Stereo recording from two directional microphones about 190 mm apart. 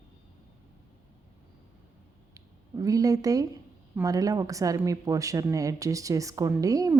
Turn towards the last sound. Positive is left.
turn(degrees=-20)  # may be behind; listen again after turning